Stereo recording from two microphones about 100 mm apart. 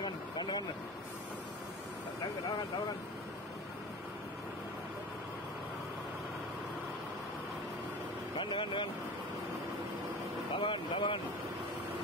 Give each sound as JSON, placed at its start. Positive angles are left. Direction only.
{"t": 0.0, "sound": "vehicle", "side_deg": 45}
{"t": 8.4, "sound": "speech", "side_deg": 55}
{"t": 10.5, "sound": "vehicle", "side_deg": 55}